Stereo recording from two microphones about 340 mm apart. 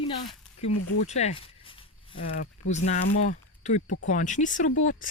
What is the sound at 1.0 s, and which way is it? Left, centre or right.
Speech, centre.